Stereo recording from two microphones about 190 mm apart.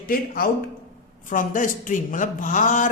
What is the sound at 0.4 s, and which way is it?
Speech, 50° left (ahead or behind).